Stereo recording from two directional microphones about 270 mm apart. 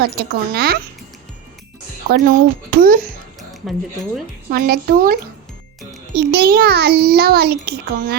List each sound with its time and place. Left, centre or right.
0.0 s a child's voice: right
2.0 s a child's voice: right
3.5 s speech: centre
4.5 s a child's voice: right
6.1 s a child's voice: right